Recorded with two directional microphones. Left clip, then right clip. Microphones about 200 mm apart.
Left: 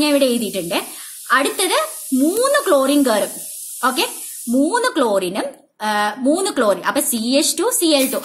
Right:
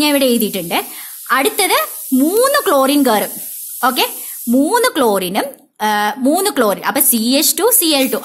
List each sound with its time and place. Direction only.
0.0 s speech: 45° right (ahead or behind)